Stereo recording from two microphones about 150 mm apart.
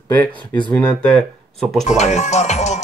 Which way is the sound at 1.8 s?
50° left (ahead or behind).